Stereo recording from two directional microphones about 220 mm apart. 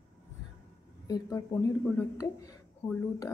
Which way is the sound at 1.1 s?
15° left (ahead or behind).